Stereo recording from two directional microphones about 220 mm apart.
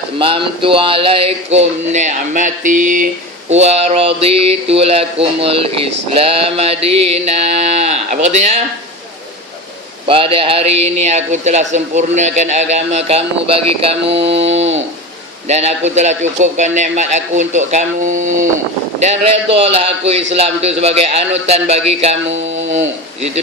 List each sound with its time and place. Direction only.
0.2 s a man's voice: 25° right (ahead or behind)
10.1 s a man's voice: 25° right (ahead or behind)